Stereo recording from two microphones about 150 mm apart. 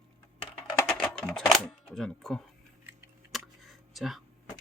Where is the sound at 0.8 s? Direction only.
5° left (ahead or behind).